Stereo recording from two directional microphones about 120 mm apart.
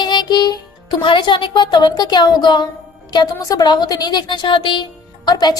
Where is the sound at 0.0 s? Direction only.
40° left (ahead or behind).